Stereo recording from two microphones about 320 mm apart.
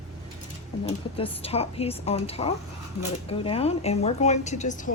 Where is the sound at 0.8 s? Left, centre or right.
Centre.